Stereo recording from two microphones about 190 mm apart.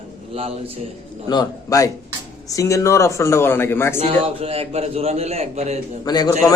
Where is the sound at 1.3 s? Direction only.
20° left (ahead or behind).